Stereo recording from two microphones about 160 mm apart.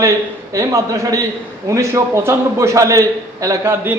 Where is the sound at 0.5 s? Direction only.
20° right (ahead or behind).